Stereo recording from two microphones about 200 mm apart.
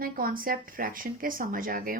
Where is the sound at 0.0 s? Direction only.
45° right (ahead or behind).